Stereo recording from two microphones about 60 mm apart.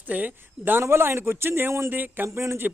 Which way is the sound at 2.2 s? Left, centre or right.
Right.